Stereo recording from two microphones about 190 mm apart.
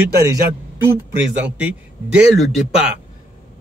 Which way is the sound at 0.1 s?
15° right (ahead or behind).